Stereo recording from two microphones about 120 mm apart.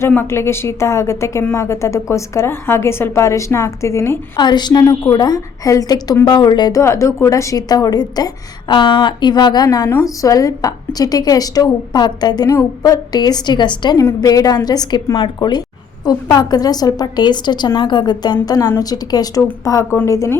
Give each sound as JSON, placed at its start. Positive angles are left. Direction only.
{"t": 0.1, "sound": "a woman's voice", "side_deg": 20}
{"t": 4.4, "sound": "a woman's voice", "side_deg": 35}
{"t": 4.8, "sound": "a woman's voice", "side_deg": 25}
{"t": 6.8, "sound": "a woman's voice", "side_deg": 25}